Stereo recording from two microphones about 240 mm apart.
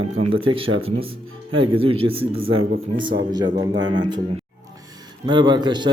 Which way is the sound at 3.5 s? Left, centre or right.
Centre.